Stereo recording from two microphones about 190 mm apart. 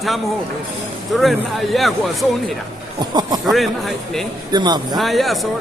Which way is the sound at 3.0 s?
20° right (ahead or behind).